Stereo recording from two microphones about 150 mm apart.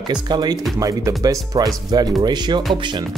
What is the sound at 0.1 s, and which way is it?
Speech, 30° right (ahead or behind).